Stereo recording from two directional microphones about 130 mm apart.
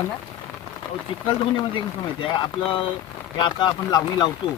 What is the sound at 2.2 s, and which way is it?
Speech, 40° left (ahead or behind).